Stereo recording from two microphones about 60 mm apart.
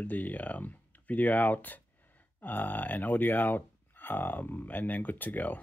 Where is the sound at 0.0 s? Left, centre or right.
Left.